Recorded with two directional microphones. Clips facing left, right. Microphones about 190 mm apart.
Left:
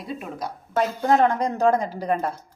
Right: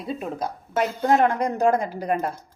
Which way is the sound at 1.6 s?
10° right (ahead or behind).